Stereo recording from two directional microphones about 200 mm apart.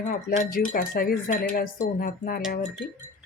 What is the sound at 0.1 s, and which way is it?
Speech, 45° left (ahead or behind).